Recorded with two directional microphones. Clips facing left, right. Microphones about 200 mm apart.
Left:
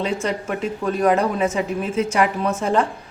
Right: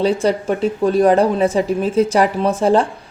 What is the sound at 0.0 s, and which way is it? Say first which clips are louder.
A woman's voice: right 7 dB; 35° right (ahead or behind).